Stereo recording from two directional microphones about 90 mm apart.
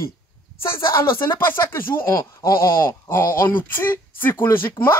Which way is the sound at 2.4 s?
40° left (ahead or behind).